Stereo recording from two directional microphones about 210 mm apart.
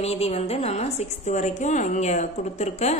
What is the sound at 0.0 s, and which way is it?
A woman's voice, 30° left (ahead or behind).